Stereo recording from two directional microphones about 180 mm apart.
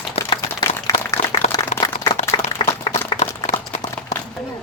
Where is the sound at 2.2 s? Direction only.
20° left (ahead or behind).